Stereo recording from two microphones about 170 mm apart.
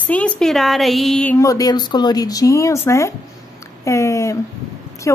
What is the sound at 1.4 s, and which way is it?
A woman's voice, 20° left (ahead or behind).